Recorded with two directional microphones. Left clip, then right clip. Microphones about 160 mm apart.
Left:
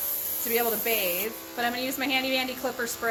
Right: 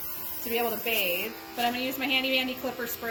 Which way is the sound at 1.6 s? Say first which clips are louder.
Even; 10° left (ahead or behind).